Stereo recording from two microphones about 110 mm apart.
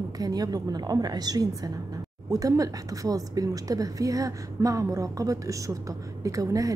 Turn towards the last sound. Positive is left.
turn(degrees=-30)  # may be behind; listen again after turning